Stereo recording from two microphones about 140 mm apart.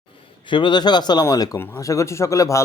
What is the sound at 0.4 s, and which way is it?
Speech, 35° left (ahead or behind).